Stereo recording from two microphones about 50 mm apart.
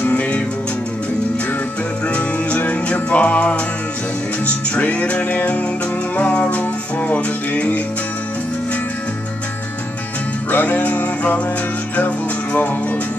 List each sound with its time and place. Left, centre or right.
0.0 s music: left
2.0 s music: left
4.7 s music: left
10.5 s music: left
12.5 s music: left